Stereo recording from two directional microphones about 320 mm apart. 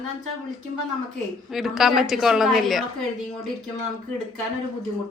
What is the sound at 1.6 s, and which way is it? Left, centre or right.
A woman's voice, centre.